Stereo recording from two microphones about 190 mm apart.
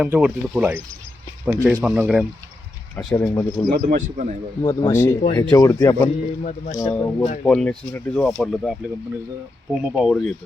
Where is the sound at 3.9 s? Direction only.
40° right (ahead or behind).